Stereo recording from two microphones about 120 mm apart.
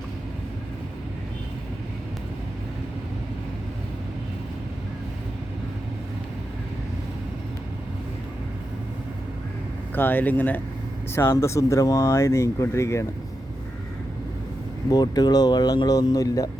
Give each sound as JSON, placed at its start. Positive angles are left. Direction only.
{"t": 9.9, "sound": "speech", "side_deg": 15}
{"t": 14.8, "sound": "speech", "side_deg": 35}